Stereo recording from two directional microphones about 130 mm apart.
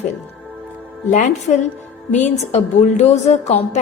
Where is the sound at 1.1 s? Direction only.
70° left (ahead or behind).